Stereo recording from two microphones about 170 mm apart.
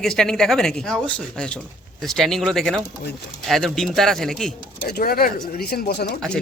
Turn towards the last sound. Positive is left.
turn(degrees=70)  # may be behind; listen again after turning